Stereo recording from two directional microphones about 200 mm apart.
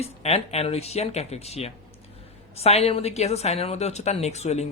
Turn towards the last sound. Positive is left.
turn(degrees=35)  # may be behind; listen again after turning